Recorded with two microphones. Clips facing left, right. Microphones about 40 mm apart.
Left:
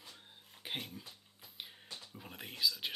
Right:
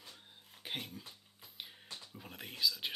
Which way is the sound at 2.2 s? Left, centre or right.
Centre.